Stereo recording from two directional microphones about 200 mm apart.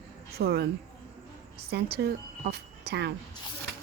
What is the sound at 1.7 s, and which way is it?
Speech, 55° right (ahead or behind).